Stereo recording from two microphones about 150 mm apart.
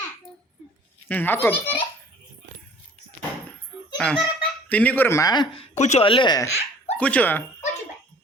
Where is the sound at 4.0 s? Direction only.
5° left (ahead or behind); by 5.4 s 25° left (ahead or behind).